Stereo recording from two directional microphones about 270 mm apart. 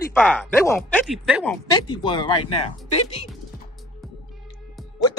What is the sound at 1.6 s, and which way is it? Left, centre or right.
Speech, centre.